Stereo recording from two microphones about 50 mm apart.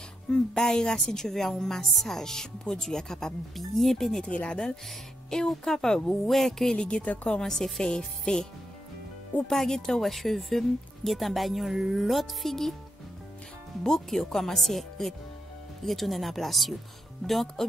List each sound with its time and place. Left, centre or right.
0.3 s speech: centre
4.3 s speech: left; by 6.7 s centre
6.7 s speech: centre
7.4 s speech: centre
9.5 s speech: centre
13.8 s speech: centre